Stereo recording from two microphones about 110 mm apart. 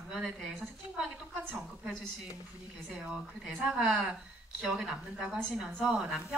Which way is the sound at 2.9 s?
5° right (ahead or behind).